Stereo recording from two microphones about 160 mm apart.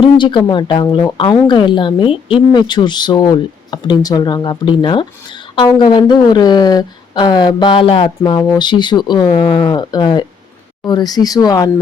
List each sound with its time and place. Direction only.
0.0 s speech: 30° left (ahead or behind)